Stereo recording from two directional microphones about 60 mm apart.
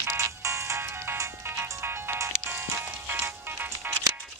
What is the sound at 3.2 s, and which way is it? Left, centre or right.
Music, right.